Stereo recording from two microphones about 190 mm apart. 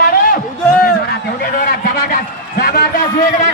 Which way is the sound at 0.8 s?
50° left (ahead or behind).